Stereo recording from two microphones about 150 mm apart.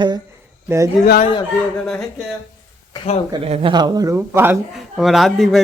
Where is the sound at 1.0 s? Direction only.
90° left.